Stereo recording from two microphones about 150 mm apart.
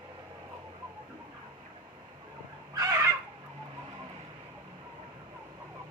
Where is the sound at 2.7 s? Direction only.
20° right (ahead or behind).